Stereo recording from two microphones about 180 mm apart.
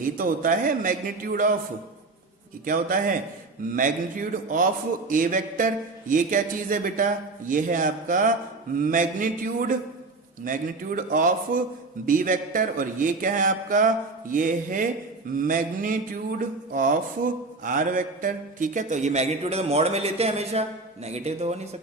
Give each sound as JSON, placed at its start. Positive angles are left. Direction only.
{"t": 0.0, "sound": "a man's voice", "side_deg": -50}
{"t": 2.6, "sound": "a man's voice", "side_deg": -50}
{"t": 16.7, "sound": "mantra", "side_deg": -50}